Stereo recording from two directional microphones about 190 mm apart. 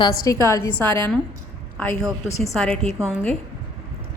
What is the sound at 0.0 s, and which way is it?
Speech, 15° left (ahead or behind).